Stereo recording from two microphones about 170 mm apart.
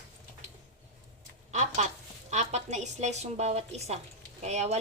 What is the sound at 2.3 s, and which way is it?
Speech, 45° right (ahead or behind).